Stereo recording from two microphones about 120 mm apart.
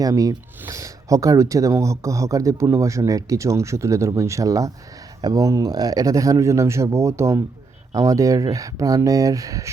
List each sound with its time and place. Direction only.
0.0 s speech: 30° right (ahead or behind)